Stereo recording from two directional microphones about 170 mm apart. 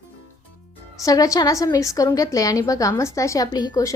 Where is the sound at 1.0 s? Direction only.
20° left (ahead or behind).